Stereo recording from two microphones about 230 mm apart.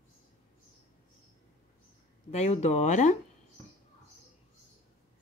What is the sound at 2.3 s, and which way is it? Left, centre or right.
Speech, left.